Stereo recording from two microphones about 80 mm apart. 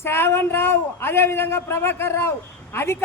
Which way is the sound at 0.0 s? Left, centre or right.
Left.